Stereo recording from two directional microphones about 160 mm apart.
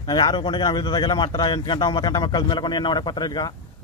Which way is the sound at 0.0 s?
25° left (ahead or behind).